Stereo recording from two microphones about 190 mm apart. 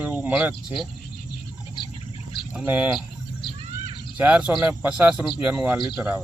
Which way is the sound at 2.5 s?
10° right (ahead or behind).